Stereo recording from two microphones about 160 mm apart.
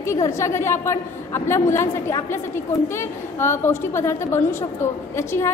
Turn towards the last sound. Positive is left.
turn(degrees=15)  # may be behind; listen again after turning